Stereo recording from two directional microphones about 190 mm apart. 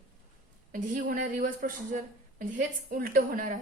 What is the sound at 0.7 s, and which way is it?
A woman's voice, 45° right (ahead or behind).